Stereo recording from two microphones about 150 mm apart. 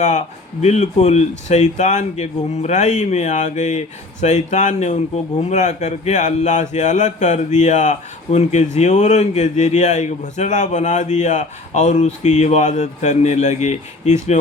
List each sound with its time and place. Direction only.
0.0 s speech: 50° left (ahead or behind)